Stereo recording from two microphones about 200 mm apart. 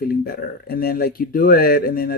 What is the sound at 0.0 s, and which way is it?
Speech, 50° left (ahead or behind).